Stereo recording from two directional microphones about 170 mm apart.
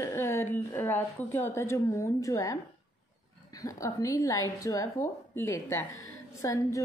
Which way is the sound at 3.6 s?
20° left (ahead or behind).